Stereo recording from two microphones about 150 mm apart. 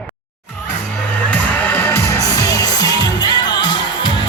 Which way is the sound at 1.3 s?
10° left (ahead or behind).